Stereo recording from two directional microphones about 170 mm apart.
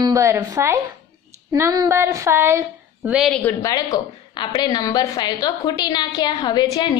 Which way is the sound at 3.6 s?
20° left (ahead or behind).